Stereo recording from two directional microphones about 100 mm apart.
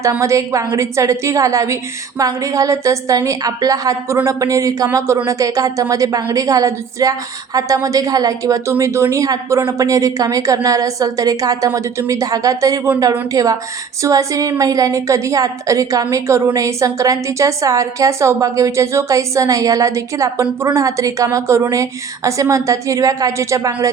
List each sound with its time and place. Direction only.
0.0 s a woman's voice: 30° right (ahead or behind)